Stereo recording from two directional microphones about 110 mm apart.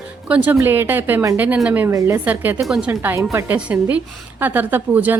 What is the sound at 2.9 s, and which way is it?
A woman's voice, 25° right (ahead or behind).